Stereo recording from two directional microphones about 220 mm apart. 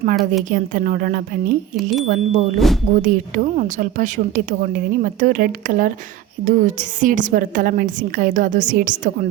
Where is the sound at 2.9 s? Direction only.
35° right (ahead or behind).